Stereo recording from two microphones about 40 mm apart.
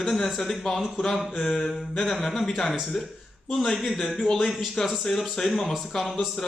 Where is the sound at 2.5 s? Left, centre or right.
Centre.